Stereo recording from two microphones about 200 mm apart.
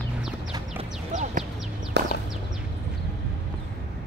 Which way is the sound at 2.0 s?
60° right (ahead or behind).